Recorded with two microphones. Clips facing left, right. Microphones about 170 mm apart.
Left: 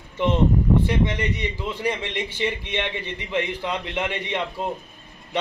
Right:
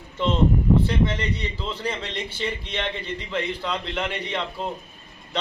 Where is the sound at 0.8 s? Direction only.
15° left (ahead or behind).